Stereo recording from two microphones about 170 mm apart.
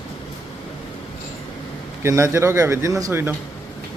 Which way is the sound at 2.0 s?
15° right (ahead or behind).